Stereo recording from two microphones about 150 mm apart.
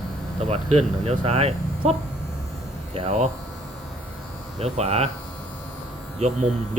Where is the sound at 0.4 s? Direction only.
45° right (ahead or behind).